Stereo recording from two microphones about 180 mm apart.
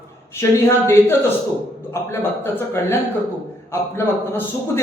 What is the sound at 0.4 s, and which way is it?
Speech, 15° left (ahead or behind).